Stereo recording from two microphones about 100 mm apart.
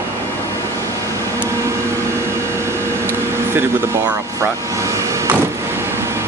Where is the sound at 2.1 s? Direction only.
25° right (ahead or behind).